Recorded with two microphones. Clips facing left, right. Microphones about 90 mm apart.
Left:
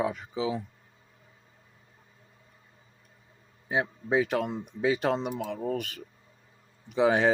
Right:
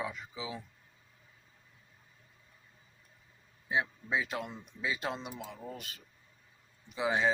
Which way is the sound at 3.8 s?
55° left (ahead or behind).